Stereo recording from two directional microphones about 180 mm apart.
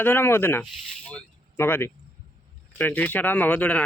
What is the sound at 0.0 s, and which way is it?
Speech, 10° left (ahead or behind).